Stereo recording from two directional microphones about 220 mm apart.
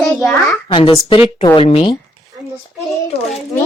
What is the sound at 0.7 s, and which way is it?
Speech, 25° left (ahead or behind).